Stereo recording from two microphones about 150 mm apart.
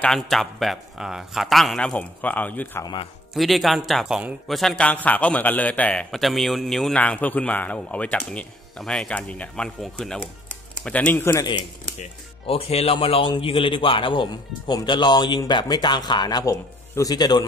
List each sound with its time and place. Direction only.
0.0 s speech: centre (ahead or behind)
2.8 s speech: 30° left (ahead or behind)
3.3 s a man's voice: centre (ahead or behind)
12.0 s speech: 40° left (ahead or behind); by 17.5 s 25° left (ahead or behind)